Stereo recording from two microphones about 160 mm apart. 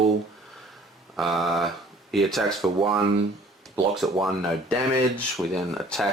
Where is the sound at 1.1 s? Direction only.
Centre (ahead or behind).